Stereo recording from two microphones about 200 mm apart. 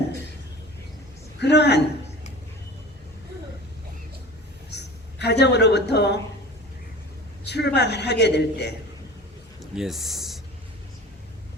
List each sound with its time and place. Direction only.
1.4 s a man's voice: 55° left (ahead or behind)
4.7 s a sound: 55° left (ahead or behind)
7.4 s a man's voice: 55° left (ahead or behind)
9.7 s speech: centre (ahead or behind)